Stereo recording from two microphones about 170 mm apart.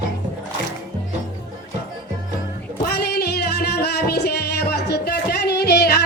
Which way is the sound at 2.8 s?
70° left (ahead or behind).